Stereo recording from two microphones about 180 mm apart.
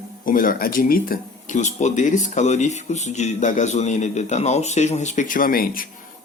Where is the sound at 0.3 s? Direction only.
50° left (ahead or behind).